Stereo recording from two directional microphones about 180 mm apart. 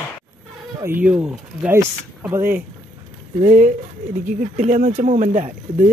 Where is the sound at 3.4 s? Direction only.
45° right (ahead or behind).